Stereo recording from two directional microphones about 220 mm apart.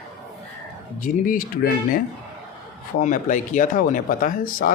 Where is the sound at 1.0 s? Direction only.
40° left (ahead or behind).